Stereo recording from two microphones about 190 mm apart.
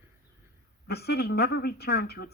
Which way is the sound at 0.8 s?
55° left (ahead or behind).